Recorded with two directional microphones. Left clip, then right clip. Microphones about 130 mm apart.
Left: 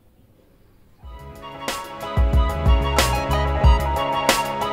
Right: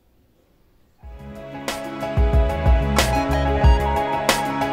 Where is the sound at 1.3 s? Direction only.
Centre (ahead or behind).